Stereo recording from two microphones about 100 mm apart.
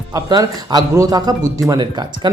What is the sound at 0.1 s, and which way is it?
Speech, 40° right (ahead or behind).